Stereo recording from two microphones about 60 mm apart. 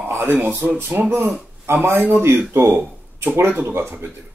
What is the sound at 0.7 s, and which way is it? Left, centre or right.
Speech, right.